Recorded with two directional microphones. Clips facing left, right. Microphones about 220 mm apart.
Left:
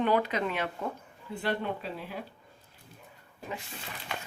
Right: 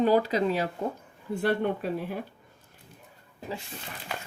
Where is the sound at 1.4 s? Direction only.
55° right (ahead or behind).